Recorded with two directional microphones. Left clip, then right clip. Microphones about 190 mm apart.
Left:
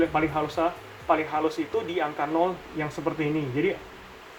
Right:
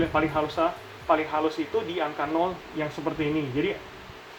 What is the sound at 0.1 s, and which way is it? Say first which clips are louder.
Speech: right 1 dB; 20° right (ahead or behind).